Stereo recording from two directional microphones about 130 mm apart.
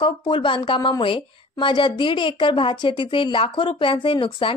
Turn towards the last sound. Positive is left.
turn(degrees=40)  # may be behind; listen again after turning